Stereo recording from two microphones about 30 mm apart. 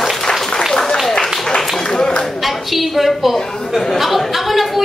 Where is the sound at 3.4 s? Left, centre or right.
Centre.